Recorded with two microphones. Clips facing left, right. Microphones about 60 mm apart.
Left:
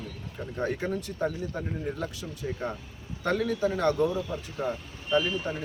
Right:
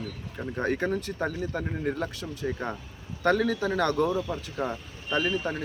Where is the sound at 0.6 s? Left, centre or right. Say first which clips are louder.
Right 2 dB; right.